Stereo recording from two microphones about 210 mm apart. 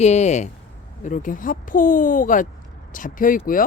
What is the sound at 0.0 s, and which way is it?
Speech, 30° left (ahead or behind).